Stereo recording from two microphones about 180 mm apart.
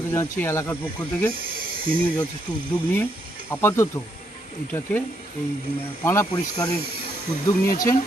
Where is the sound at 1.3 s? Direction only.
55° right (ahead or behind).